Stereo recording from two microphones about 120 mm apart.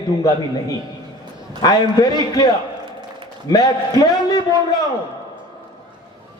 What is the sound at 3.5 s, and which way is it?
Speech, 35° left (ahead or behind).